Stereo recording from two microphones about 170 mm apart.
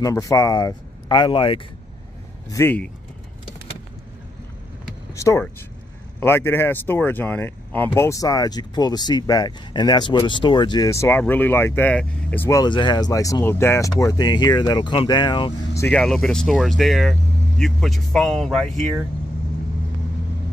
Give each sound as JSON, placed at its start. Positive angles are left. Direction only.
{"t": 0.0, "sound": "speech", "side_deg": 20}
{"t": 2.5, "sound": "speech", "side_deg": 10}
{"t": 5.1, "sound": "speech", "side_deg": 15}
{"t": 15.8, "sound": "speech", "side_deg": 5}